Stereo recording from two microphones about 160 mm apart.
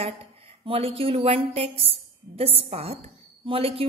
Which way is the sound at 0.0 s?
35° right (ahead or behind).